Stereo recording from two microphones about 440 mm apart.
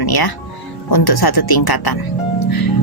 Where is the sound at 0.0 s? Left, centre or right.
Left.